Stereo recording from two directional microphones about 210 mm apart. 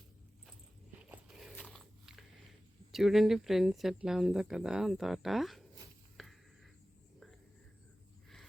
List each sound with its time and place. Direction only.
1.0 s biting: 5° right (ahead or behind)
2.9 s speech: centre (ahead or behind)
6.2 s a sound: centre (ahead or behind)